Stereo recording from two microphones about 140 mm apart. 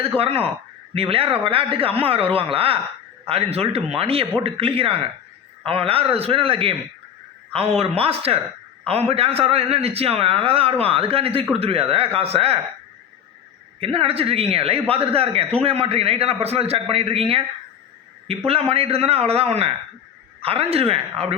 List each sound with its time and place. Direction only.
0.2 s a man's voice: 45° right (ahead or behind)
13.7 s a man's voice: 45° right (ahead or behind)